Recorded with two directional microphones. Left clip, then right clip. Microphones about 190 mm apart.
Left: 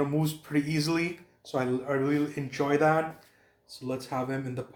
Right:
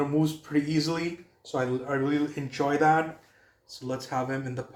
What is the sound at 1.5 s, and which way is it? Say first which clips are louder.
Speech: even; 30° left (ahead or behind).